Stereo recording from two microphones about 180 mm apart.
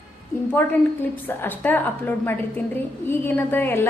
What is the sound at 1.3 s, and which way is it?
A woman's voice, 10° left (ahead or behind).